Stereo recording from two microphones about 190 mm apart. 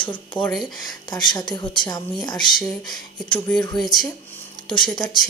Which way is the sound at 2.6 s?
Centre (ahead or behind).